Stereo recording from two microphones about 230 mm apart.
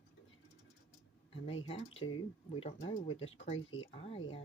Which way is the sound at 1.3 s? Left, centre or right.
Left.